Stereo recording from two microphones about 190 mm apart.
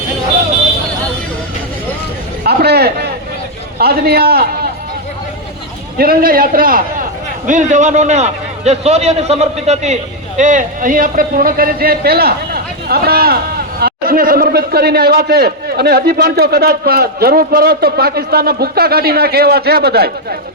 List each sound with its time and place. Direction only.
2.4 s a sound: 55° right (ahead or behind)
3.8 s a man's voice: 55° right (ahead or behind)
6.0 s a man's voice: 50° right (ahead or behind)